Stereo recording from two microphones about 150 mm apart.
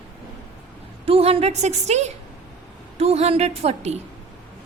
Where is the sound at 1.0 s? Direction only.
40° right (ahead or behind).